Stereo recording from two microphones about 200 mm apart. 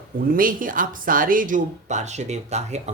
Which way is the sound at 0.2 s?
45° right (ahead or behind).